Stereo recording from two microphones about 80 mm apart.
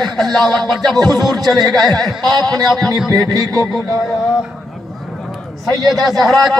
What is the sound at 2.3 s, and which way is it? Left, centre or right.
Music, right.